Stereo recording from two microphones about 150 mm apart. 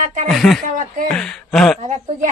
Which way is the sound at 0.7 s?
65° right (ahead or behind).